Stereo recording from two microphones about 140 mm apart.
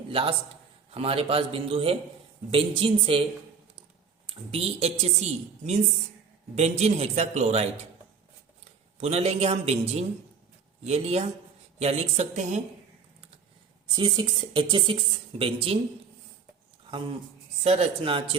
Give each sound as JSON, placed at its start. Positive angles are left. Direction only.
{"t": 0.1, "sound": "a man's voice", "side_deg": -40}
{"t": 4.3, "sound": "a man's voice", "side_deg": -45}
{"t": 6.6, "sound": "a man's voice", "side_deg": -55}
{"t": 9.0, "sound": "a man's voice", "side_deg": -50}
{"t": 13.9, "sound": "speech", "side_deg": -35}
{"t": 17.6, "sound": "a man's voice", "side_deg": -45}